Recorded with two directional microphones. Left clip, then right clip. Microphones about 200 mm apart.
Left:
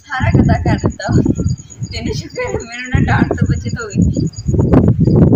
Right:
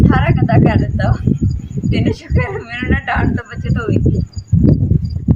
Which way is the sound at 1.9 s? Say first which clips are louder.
Right 4 dB; centre (ahead or behind).